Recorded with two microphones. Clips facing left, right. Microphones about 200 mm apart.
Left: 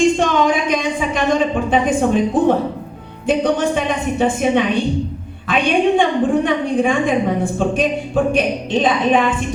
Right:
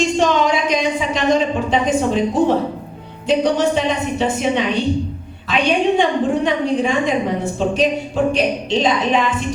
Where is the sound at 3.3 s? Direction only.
55° left (ahead or behind).